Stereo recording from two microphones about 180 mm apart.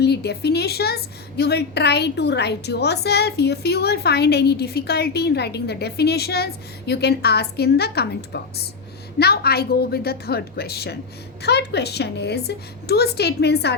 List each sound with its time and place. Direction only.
0.0 s a woman's voice: 65° left (ahead or behind)